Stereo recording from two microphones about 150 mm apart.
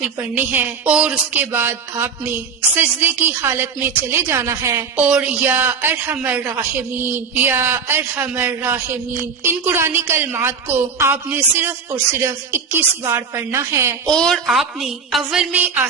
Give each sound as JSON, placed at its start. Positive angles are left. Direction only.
{"t": 0.0, "sound": "speech", "side_deg": -10}
{"t": 14.1, "sound": "a woman's voice", "side_deg": 5}